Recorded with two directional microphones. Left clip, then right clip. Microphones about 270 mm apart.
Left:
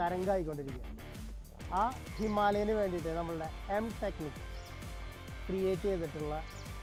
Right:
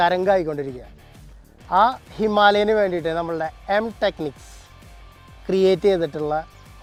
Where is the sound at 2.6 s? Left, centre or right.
Right.